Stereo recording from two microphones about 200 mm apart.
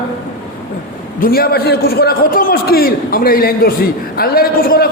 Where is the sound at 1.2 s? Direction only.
50° left (ahead or behind).